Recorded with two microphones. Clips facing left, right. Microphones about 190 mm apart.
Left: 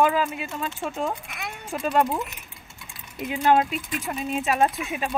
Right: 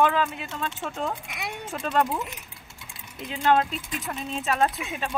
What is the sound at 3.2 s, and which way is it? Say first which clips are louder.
Speech: left 2 dB; 10° left (ahead or behind).